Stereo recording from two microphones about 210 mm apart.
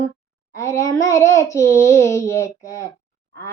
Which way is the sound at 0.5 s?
15° left (ahead or behind).